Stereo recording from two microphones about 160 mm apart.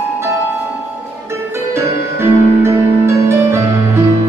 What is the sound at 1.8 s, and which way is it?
Music, 15° right (ahead or behind).